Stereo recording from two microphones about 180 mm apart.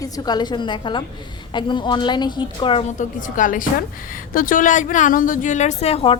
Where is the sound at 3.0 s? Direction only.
45° left (ahead or behind).